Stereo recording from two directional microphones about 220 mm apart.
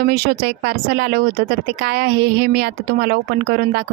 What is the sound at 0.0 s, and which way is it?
Speech, 45° right (ahead or behind).